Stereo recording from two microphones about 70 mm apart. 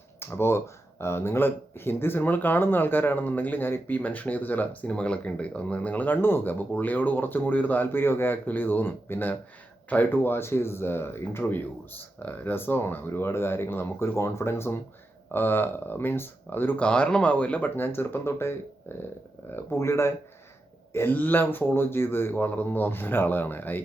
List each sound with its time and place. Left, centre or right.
0.2 s speech: left
16.7 s speech: centre
17.7 s speech: left
20.9 s speech: left